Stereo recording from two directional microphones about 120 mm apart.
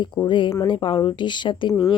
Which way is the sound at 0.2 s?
40° left (ahead or behind).